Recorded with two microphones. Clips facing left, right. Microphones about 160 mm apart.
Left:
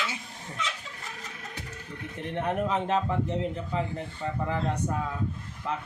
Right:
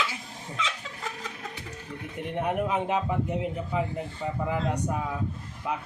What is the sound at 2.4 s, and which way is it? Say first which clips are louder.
A man's voice: right 1 dB; 10° right (ahead or behind).